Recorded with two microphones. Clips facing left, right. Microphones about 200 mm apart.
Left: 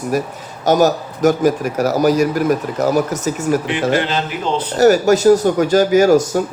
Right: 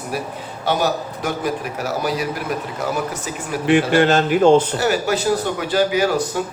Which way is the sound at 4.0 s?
45° right (ahead or behind).